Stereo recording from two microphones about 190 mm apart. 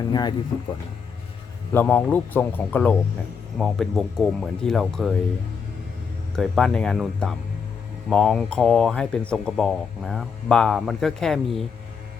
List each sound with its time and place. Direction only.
0.1 s speech: 20° left (ahead or behind)
1.7 s speech: 10° left (ahead or behind)
6.3 s speech: 5° left (ahead or behind)